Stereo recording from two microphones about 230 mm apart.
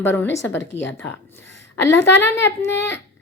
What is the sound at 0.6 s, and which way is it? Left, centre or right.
Speech, left.